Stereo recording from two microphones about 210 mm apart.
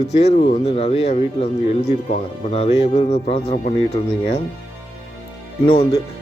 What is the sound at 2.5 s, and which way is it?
Speech, 30° left (ahead or behind).